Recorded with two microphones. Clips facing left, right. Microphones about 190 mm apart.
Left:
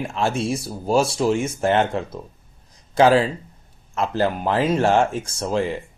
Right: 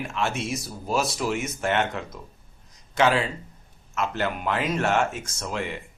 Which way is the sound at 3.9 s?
35° left (ahead or behind).